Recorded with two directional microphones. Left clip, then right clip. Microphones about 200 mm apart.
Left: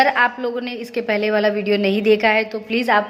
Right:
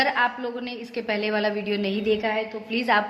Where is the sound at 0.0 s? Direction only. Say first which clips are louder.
Left 6 dB; 25° left (ahead or behind).